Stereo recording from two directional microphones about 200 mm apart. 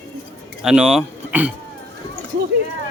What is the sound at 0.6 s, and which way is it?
Speech, 5° right (ahead or behind).